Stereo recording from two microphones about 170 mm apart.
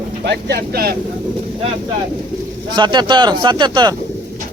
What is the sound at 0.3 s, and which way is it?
Speech, 75° right (ahead or behind).